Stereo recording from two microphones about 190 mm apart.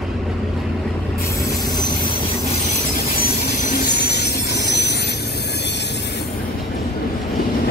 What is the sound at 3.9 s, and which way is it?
Train, 60° left (ahead or behind).